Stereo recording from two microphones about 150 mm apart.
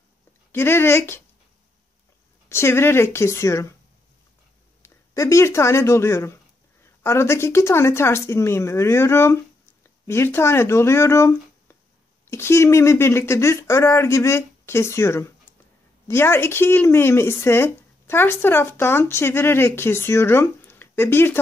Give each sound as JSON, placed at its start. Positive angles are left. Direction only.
{"t": 0.5, "sound": "speech", "side_deg": 15}
{"t": 2.5, "sound": "speech", "side_deg": 15}
{"t": 4.8, "sound": "speech", "side_deg": 20}